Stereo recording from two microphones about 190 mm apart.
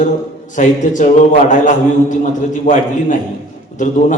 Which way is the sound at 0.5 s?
40° left (ahead or behind).